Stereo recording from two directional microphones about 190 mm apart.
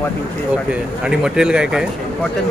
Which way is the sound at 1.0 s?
5° right (ahead or behind).